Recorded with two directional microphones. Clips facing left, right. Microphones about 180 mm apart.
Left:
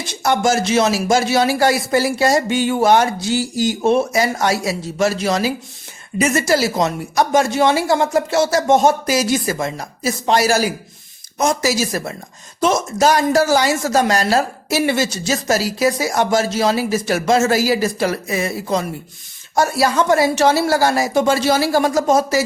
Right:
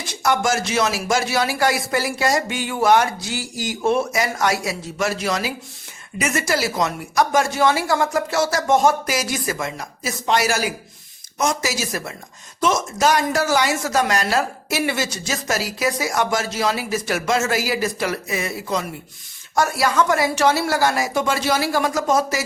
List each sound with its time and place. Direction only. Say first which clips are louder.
0.1 s speech: left 3 dB; 25° left (ahead or behind)